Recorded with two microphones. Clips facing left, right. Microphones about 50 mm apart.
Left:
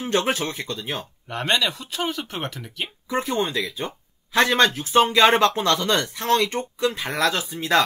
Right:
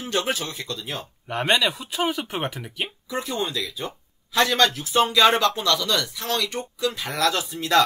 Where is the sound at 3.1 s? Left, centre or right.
Left.